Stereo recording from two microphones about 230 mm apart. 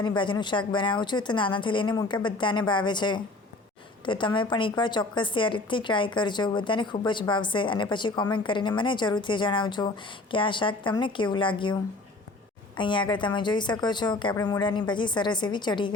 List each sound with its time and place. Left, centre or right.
0.0 s a woman's voice: centre